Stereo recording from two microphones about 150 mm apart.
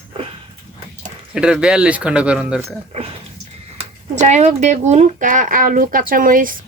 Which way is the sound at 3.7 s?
50° right (ahead or behind).